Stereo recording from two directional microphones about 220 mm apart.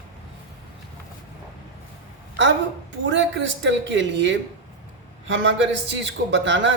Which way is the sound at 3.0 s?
55° right (ahead or behind).